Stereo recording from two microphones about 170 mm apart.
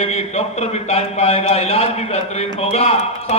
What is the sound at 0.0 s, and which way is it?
A man's voice, 40° left (ahead or behind).